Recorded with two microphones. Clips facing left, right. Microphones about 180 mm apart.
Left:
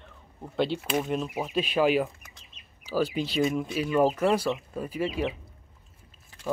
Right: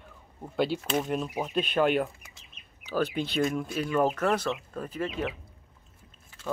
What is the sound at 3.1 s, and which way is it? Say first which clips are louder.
Speech: left 2 dB; 5° left (ahead or behind).